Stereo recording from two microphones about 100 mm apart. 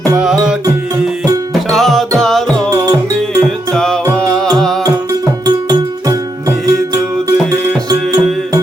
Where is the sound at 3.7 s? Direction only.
5° left (ahead or behind).